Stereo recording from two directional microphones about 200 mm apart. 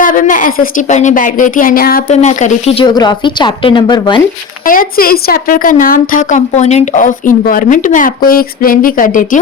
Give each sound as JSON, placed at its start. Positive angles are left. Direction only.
{"t": 0.0, "sound": "a woman's voice", "side_deg": 40}
{"t": 2.0, "sound": "speech", "side_deg": 35}
{"t": 4.6, "sound": "a woman's voice", "side_deg": 45}